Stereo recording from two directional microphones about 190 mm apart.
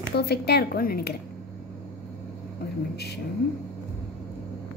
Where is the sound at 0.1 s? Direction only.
55° left (ahead or behind).